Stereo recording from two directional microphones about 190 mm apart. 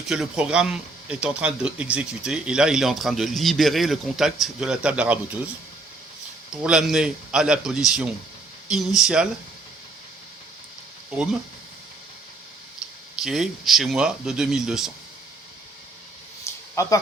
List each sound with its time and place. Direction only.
0.1 s speech: 5° right (ahead or behind)
6.5 s speech: 5° right (ahead or behind)
13.2 s speech: centre (ahead or behind)
16.8 s speech: 15° left (ahead or behind)